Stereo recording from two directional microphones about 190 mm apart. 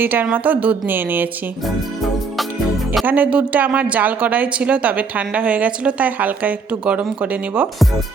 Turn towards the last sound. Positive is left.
turn(degrees=-5)  # may be behind; listen again after turning